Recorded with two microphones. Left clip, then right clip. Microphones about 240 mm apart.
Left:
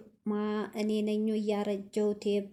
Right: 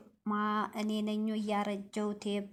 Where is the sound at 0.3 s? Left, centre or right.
Centre.